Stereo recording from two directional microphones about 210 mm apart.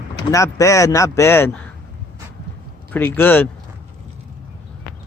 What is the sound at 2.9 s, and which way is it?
Speech, 10° left (ahead or behind).